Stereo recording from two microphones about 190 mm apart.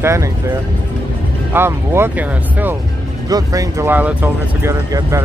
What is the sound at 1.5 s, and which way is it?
Speech, 10° right (ahead or behind).